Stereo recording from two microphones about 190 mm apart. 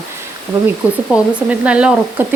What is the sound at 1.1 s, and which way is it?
Speech, 5° right (ahead or behind).